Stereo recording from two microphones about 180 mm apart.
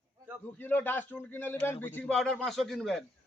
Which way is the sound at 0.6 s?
10° left (ahead or behind).